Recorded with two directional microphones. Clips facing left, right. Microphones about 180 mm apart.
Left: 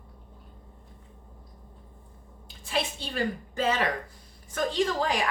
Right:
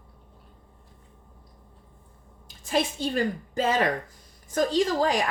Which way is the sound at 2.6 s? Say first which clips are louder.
Right 5 dB; 45° right (ahead or behind).